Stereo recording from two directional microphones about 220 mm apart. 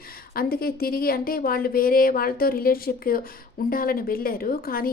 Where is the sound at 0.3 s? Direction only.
40° left (ahead or behind).